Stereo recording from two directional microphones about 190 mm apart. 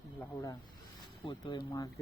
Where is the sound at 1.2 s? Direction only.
25° left (ahead or behind).